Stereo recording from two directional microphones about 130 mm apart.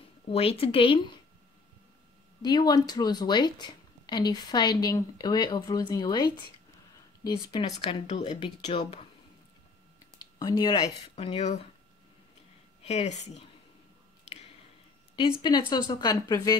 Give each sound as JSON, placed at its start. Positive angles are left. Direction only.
{"t": 0.3, "sound": "speech", "side_deg": 50}
{"t": 2.4, "sound": "a woman's voice", "side_deg": 30}
{"t": 7.6, "sound": "speech", "side_deg": 50}
{"t": 10.1, "sound": "a sound", "side_deg": 30}
{"t": 11.1, "sound": "speech", "side_deg": 55}
{"t": 12.8, "sound": "speech", "side_deg": 55}
{"t": 15.7, "sound": "speech", "side_deg": 30}